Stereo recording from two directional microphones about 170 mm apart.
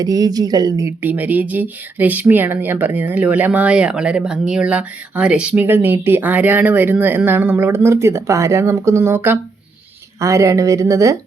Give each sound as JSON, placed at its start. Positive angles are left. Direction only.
{"t": 0.0, "sound": "a woman's voice", "side_deg": -20}